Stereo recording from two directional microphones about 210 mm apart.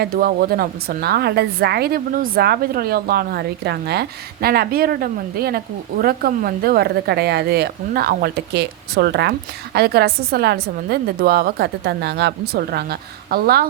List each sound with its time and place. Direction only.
0.0 s a woman's voice: 45° right (ahead or behind)